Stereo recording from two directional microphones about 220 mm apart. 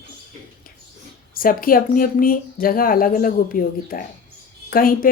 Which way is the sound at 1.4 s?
40° left (ahead or behind).